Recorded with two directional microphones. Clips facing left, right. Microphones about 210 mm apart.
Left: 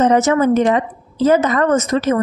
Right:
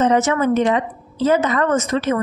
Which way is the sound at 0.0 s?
40° left (ahead or behind).